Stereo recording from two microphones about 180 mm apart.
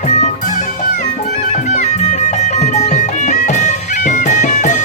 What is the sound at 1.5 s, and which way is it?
Music, 40° left (ahead or behind).